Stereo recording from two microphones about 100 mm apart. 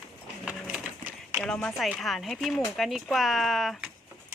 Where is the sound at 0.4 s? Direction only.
10° right (ahead or behind).